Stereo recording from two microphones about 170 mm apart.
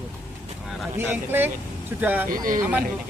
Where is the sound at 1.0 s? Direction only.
10° right (ahead or behind).